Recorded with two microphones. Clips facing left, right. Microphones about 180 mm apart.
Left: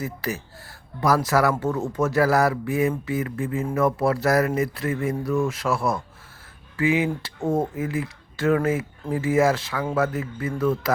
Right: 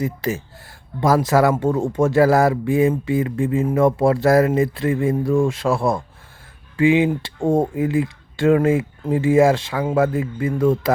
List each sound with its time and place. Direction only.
0.0 s speech: 20° right (ahead or behind)